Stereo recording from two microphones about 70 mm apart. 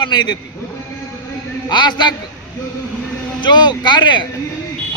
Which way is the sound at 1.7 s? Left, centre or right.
Left.